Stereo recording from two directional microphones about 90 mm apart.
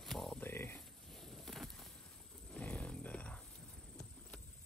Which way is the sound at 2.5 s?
15° left (ahead or behind).